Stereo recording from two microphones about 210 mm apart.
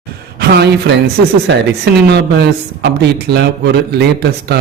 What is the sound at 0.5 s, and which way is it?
A man's voice, 50° right (ahead or behind).